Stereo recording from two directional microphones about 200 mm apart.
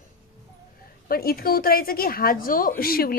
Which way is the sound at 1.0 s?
50° left (ahead or behind).